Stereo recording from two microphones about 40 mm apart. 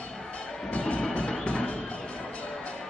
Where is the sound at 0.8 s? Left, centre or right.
Left.